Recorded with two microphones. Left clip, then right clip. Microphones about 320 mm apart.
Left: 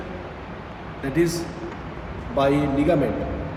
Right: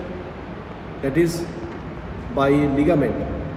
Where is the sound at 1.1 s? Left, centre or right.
Centre.